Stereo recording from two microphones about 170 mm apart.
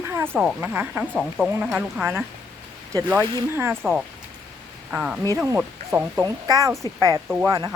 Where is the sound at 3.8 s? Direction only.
Centre (ahead or behind).